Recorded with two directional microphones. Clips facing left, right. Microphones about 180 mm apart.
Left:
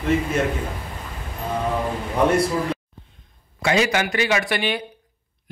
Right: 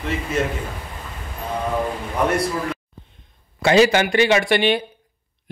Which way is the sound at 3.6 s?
30° right (ahead or behind).